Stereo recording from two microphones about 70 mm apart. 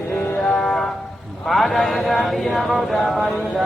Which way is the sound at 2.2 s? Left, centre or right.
Centre.